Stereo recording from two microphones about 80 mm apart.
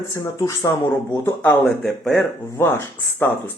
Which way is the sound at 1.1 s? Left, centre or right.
Left.